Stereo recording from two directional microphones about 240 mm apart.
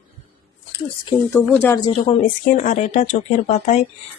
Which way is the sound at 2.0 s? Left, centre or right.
Left.